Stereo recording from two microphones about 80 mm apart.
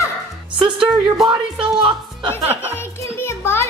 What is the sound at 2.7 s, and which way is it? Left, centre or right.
Music, left.